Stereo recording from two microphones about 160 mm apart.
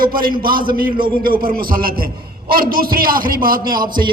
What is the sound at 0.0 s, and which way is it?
A man's voice, 65° right (ahead or behind).